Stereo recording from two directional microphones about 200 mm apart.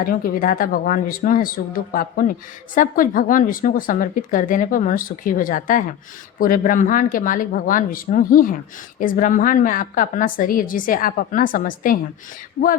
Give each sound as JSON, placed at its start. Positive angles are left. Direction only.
{"t": 0.0, "sound": "speech", "side_deg": 45}